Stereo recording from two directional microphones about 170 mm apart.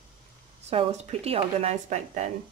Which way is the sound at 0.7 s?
40° right (ahead or behind).